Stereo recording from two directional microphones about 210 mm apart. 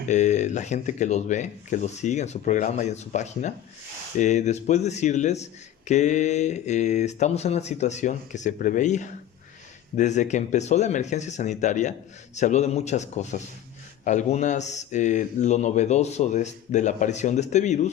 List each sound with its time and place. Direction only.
0.1 s speech: 35° left (ahead or behind)